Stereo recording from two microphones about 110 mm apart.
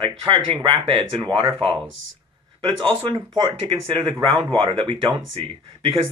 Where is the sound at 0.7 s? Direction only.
55° right (ahead or behind).